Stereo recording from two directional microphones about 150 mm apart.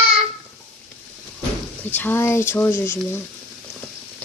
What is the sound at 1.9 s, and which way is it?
Speech, 15° left (ahead or behind).